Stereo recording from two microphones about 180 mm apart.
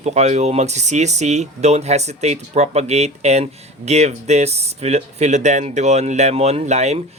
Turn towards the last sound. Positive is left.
turn(degrees=-40)  # may be behind; listen again after turning